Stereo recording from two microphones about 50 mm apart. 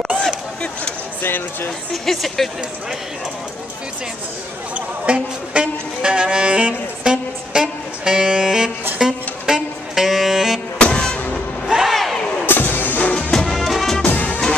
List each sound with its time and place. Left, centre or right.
1.2 s speech: left
2.0 s speech: centre
4.7 s music: right; by 10.6 s centre
10.8 s music: centre
11.7 s crowd: centre
12.4 s music: left
13.3 s music: centre
14.0 s music: left